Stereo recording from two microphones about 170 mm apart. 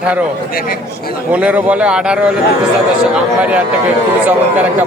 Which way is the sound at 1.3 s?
5° right (ahead or behind).